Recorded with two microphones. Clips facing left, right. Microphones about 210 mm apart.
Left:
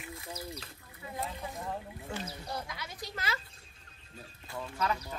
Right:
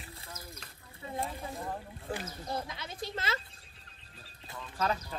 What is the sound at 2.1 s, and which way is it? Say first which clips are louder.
Speech: right 2 dB; 35° right (ahead or behind).